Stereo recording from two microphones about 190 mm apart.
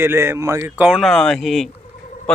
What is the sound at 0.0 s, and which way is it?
Speech, 15° right (ahead or behind).